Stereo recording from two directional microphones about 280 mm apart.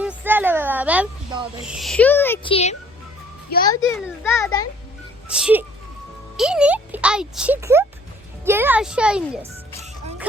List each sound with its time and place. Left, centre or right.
0.0 s a sound: centre
1.6 s speech: centre
2.5 s a child's voice: left
5.3 s speech: centre